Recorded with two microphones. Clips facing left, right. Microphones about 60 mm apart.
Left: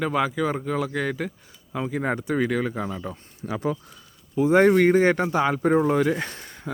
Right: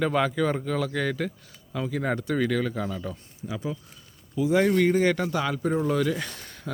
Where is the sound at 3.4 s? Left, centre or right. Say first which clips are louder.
Left 6 dB; left.